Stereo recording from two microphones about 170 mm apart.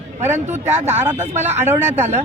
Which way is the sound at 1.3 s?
40° right (ahead or behind).